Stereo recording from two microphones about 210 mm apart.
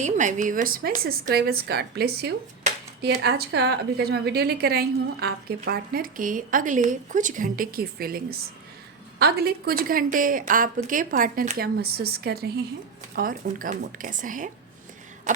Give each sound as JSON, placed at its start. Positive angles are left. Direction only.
{"t": 0.0, "sound": "a woman's voice", "side_deg": -35}